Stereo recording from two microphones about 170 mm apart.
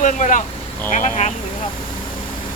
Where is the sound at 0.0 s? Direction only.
50° left (ahead or behind).